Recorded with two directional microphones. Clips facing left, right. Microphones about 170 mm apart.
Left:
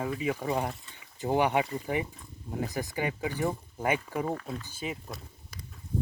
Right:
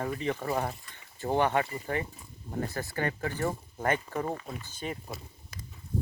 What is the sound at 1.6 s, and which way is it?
Speech, 5° right (ahead or behind).